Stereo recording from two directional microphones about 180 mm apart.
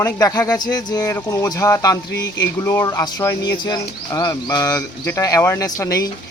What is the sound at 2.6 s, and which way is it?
Speech, 15° left (ahead or behind).